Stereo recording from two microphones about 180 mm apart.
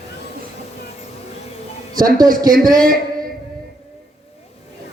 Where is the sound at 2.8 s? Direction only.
50° right (ahead or behind).